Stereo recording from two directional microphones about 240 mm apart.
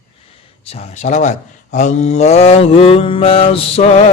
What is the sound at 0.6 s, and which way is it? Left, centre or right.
Speech, left.